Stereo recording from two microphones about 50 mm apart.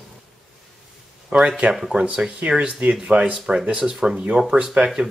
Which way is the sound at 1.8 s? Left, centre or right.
Centre.